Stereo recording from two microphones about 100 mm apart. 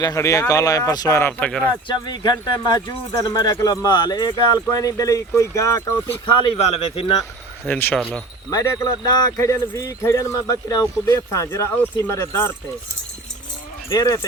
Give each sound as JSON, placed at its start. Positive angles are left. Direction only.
{"t": 0.0, "sound": "speech", "side_deg": 35}
{"t": 1.2, "sound": "speech", "side_deg": 15}
{"t": 1.9, "sound": "speech", "side_deg": 50}
{"t": 3.1, "sound": "speech", "side_deg": 35}
{"t": 6.6, "sound": "speech", "side_deg": 75}
{"t": 7.6, "sound": "speech", "side_deg": 20}
{"t": 8.4, "sound": "speech", "side_deg": 40}
{"t": 13.9, "sound": "speech", "side_deg": 30}